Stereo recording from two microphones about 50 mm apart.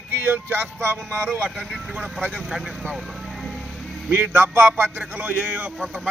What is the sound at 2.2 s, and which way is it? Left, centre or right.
Speech, right.